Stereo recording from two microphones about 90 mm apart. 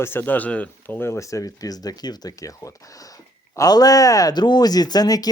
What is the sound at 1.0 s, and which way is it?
Speech, 35° left (ahead or behind).